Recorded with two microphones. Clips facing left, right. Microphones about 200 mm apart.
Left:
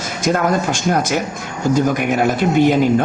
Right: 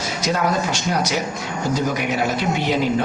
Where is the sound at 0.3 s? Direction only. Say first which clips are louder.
Left 5 dB; 50° left (ahead or behind).